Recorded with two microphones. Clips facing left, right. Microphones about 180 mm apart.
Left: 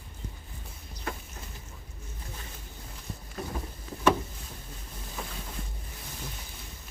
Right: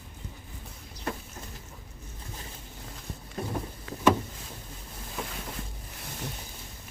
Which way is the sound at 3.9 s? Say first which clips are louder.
Right 2 dB; 90° right.